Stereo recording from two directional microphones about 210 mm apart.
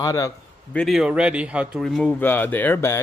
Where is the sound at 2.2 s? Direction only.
10° left (ahead or behind).